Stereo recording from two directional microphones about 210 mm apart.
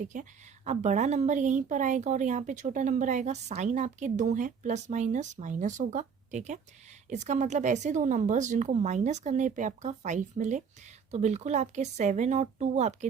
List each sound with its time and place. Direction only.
0.0 s a woman's voice: 35° right (ahead or behind)